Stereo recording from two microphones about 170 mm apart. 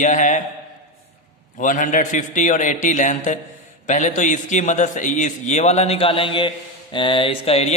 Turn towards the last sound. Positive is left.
turn(degrees=35)  # may be behind; listen again after turning